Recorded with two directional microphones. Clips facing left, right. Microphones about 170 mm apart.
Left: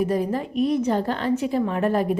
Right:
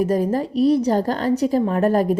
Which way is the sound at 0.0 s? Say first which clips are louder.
Right 4 dB; 40° right (ahead or behind).